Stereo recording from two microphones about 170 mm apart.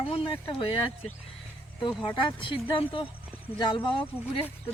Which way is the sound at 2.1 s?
30° left (ahead or behind).